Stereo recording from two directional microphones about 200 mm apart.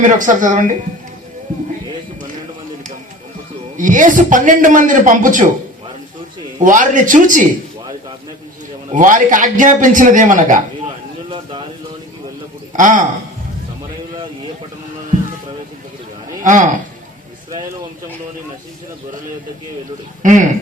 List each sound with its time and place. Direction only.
0.0 s a man's voice: 40° right (ahead or behind)
1.5 s a sound: 40° right (ahead or behind)
3.8 s a man's voice: 40° right (ahead or behind)
6.6 s a man's voice: 40° right (ahead or behind)
8.9 s a man's voice: 40° right (ahead or behind)
12.7 s a man's voice: 40° right (ahead or behind)
16.4 s a man's voice: 40° right (ahead or behind)
20.2 s a man's voice: 40° right (ahead or behind)